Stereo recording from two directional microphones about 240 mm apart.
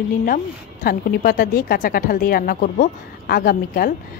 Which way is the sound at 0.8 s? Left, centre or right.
Left.